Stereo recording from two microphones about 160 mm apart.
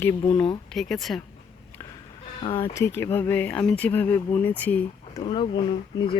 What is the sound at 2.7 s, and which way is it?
Speech, 15° left (ahead or behind).